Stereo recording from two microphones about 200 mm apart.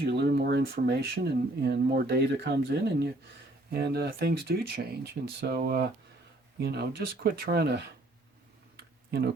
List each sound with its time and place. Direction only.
0.0 s speech: 55° right (ahead or behind)
8.7 s computer keyboard: 55° right (ahead or behind)